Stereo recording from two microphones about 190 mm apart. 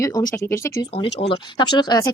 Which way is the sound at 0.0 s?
20° left (ahead or behind).